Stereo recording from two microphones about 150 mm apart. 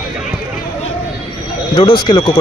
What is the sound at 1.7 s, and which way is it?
Speech, 30° left (ahead or behind).